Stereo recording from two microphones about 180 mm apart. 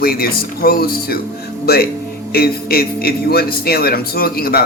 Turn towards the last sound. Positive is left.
turn(degrees=60)  # may be behind; listen again after turning